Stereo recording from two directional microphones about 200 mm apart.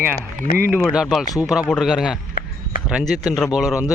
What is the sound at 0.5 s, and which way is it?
Speech, 10° right (ahead or behind).